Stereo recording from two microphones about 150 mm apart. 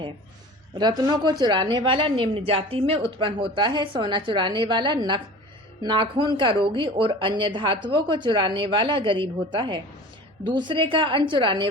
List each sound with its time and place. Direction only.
0.8 s a woman's voice: 30° right (ahead or behind)